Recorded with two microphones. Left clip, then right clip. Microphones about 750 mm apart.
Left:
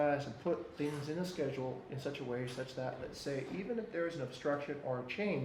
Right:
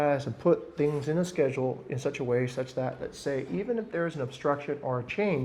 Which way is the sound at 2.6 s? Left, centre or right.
Right.